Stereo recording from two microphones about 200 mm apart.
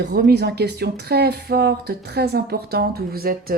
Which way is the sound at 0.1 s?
55° right (ahead or behind).